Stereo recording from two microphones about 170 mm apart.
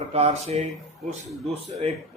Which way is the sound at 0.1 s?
40° right (ahead or behind).